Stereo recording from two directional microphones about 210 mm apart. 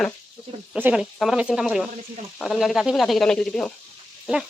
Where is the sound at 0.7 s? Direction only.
5° right (ahead or behind).